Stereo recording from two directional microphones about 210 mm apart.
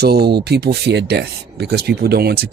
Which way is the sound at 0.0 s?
50° right (ahead or behind).